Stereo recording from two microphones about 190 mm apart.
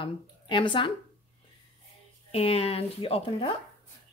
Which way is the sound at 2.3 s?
30° left (ahead or behind).